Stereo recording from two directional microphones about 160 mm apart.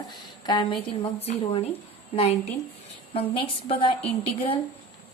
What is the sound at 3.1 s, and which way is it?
A woman's voice, 35° left (ahead or behind).